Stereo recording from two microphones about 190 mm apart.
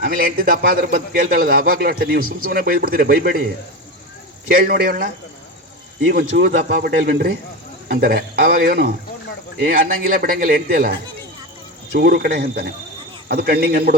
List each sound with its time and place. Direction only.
0.0 s a man's voice: 50° right (ahead or behind)
4.6 s a man's voice: 50° right (ahead or behind)
6.1 s a man's voice: 55° right (ahead or behind)